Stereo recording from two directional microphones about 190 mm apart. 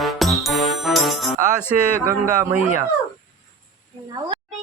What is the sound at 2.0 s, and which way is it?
Speech, 15° right (ahead or behind).